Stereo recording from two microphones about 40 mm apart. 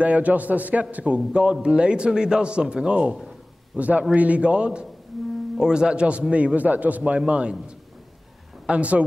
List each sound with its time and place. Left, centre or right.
0.0 s a man's voice: right
3.7 s a man's voice: right
7.2 s a man's voice: right